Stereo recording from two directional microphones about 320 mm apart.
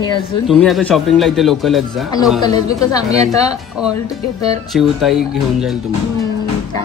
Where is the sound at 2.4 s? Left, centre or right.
Centre.